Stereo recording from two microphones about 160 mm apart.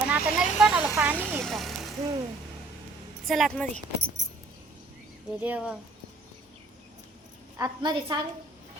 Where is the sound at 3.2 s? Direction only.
Centre (ahead or behind).